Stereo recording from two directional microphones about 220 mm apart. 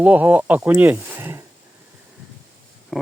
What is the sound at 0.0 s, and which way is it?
Speech, 5° right (ahead or behind).